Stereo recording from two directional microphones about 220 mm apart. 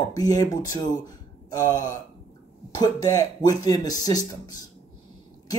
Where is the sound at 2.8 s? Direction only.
15° left (ahead or behind).